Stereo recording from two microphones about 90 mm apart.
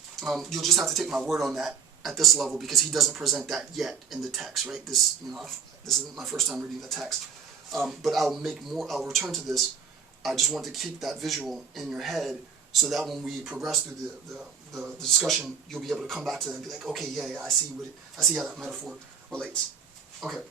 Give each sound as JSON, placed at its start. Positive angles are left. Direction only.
{"t": 0.2, "sound": "speech", "side_deg": 0}